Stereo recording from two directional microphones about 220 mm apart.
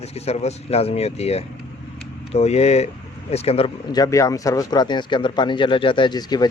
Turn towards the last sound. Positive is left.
turn(degrees=20)  # may be behind; listen again after turning